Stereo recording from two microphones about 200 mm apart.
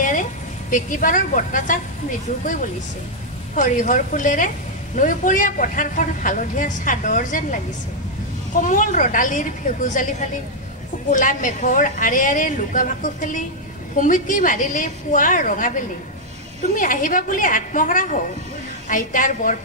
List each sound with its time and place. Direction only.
0.0 s a woman's voice: 40° left (ahead or behind)
3.5 s a man's voice: 40° left (ahead or behind)
8.6 s a man's voice: 40° left (ahead or behind)